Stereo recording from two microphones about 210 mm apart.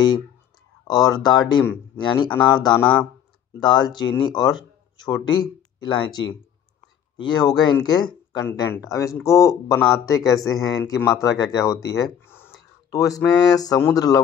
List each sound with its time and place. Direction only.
0.8 s speech: 20° left (ahead or behind)
2.6 s speech: 5° left (ahead or behind)
3.6 s speech: 20° left (ahead or behind)